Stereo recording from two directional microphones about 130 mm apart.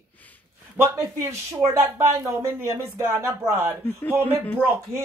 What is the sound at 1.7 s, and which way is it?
Speech, 20° right (ahead or behind).